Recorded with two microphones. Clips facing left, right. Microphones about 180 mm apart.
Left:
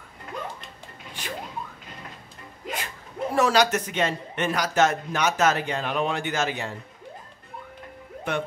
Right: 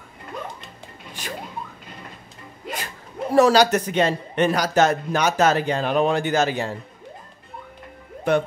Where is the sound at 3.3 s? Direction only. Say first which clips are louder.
Right 6 dB; 35° right (ahead or behind).